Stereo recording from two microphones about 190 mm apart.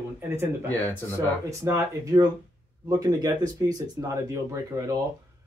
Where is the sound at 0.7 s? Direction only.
10° left (ahead or behind).